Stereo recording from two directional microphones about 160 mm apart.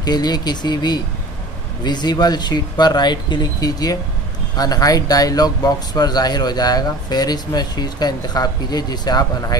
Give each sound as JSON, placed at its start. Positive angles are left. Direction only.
{"t": 0.0, "sound": "speech", "side_deg": 25}